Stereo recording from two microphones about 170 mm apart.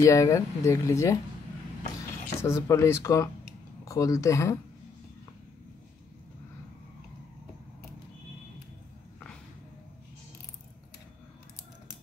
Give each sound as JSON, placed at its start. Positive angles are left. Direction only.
{"t": 0.0, "sound": "speech", "side_deg": 20}
{"t": 2.4, "sound": "speech", "side_deg": 15}